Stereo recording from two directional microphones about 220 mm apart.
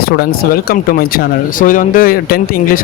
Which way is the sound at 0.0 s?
45° left (ahead or behind).